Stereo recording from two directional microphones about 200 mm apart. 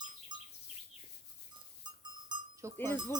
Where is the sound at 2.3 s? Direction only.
15° right (ahead or behind).